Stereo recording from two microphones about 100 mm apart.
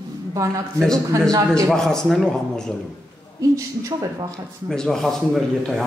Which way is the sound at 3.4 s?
35° right (ahead or behind).